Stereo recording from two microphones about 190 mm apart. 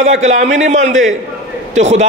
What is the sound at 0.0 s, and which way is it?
A man's voice, 35° right (ahead or behind).